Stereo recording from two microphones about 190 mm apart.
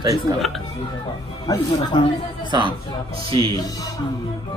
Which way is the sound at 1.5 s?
20° left (ahead or behind).